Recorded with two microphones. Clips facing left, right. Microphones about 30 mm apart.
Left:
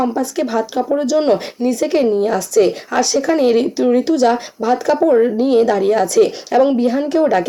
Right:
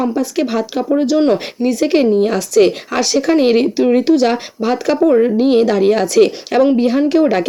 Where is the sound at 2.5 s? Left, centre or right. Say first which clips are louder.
Right 2 dB; right.